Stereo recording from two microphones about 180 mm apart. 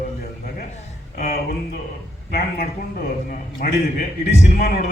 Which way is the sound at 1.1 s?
55° left (ahead or behind).